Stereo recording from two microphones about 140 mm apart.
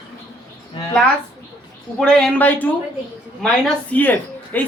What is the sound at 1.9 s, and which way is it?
Speech, 5° left (ahead or behind).